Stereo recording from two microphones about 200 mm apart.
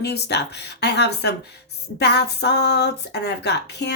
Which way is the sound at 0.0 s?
55° left (ahead or behind).